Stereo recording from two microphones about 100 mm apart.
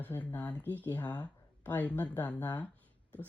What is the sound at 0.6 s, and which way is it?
Speech, 20° right (ahead or behind).